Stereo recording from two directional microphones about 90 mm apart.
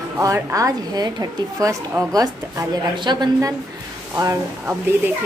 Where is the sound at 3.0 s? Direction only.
60° right (ahead or behind).